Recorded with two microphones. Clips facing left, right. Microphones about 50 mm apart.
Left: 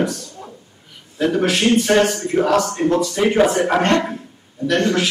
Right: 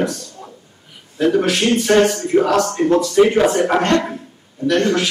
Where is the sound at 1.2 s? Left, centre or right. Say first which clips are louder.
Right 1 dB; centre.